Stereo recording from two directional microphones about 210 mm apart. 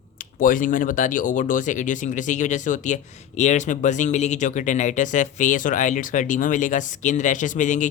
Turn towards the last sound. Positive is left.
turn(degrees=35)  # may be behind; listen again after turning